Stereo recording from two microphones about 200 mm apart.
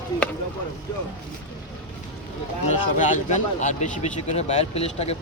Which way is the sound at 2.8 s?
40° left (ahead or behind).